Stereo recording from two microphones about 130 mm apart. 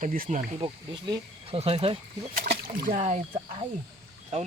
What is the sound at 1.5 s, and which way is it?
Speech, 50° right (ahead or behind).